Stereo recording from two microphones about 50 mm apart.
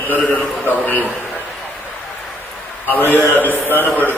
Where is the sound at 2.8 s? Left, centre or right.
Left.